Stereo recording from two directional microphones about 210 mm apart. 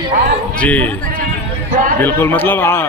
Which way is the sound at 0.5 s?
5° left (ahead or behind).